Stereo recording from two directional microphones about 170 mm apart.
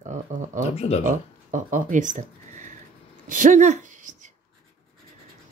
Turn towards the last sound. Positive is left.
turn(degrees=-50)  # may be behind; listen again after turning